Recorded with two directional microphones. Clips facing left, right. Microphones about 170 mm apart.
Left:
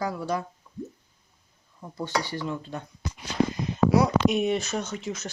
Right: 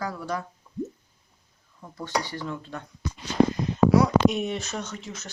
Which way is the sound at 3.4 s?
60° right (ahead or behind).